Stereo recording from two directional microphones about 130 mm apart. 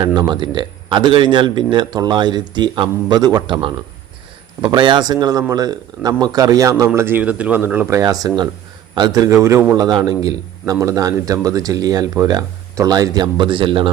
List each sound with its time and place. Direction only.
0.0 s a man's voice: 35° right (ahead or behind); by 7.9 s 15° right (ahead or behind)
7.9 s a man's voice: 30° right (ahead or behind)